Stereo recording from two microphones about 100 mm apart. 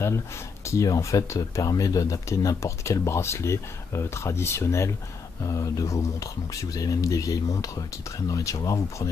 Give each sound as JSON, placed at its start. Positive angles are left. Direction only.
{"t": 0.7, "sound": "speech", "side_deg": 35}